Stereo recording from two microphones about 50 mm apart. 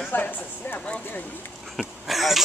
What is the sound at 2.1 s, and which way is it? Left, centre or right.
Speech, centre.